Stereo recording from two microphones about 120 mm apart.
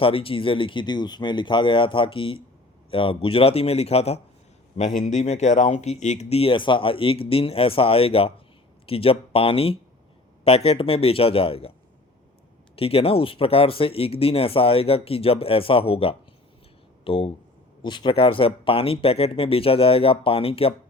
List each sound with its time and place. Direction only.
0.0 s speech: 50° left (ahead or behind)
4.8 s speech: 90° left; by 11.7 s 50° left (ahead or behind)
12.7 s speech: 55° left (ahead or behind)
17.8 s speech: 40° left (ahead or behind)